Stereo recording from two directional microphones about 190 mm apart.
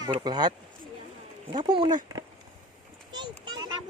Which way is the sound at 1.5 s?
25° right (ahead or behind).